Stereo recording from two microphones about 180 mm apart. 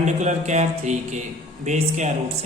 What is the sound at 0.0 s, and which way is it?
Speech, 40° right (ahead or behind).